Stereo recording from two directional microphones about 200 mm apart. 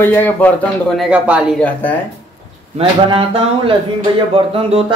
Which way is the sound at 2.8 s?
25° right (ahead or behind).